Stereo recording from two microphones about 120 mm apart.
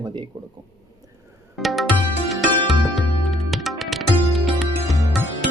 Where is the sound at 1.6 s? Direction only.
Centre (ahead or behind).